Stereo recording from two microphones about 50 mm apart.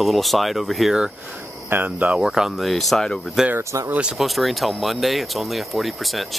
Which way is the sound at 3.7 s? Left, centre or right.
Right.